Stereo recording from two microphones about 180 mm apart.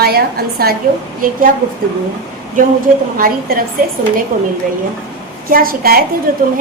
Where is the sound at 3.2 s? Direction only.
50° right (ahead or behind).